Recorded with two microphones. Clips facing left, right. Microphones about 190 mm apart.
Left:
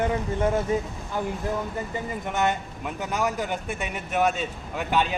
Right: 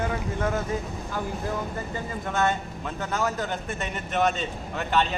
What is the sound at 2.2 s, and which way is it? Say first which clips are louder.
A man's voice: right 1 dB; 15° left (ahead or behind).